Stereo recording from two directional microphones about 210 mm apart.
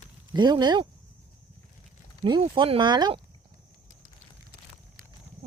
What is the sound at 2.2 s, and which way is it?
Speech, 20° right (ahead or behind).